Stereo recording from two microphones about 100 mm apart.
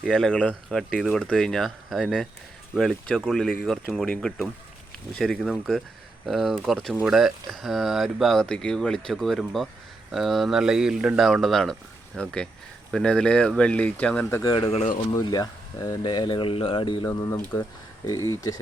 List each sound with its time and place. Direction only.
0.0 s speech: 5° left (ahead or behind)
15.2 s speech: 40° left (ahead or behind)
17.1 s speech: 30° left (ahead or behind)